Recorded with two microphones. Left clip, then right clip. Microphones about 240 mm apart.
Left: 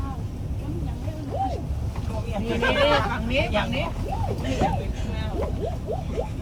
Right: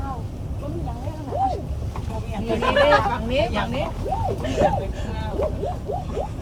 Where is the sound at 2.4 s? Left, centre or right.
Centre.